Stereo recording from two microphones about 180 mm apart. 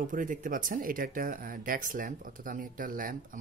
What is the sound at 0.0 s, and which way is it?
Speech, 45° right (ahead or behind).